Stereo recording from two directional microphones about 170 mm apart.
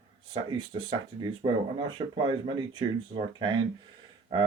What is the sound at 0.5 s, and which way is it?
Speech, 30° right (ahead or behind).